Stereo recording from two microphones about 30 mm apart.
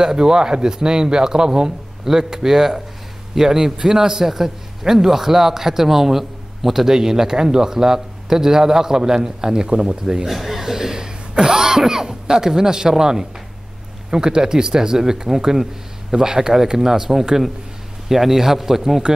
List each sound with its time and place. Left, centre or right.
0.0 s a man's voice: right
10.2 s cough: centre
12.4 s a man's voice: right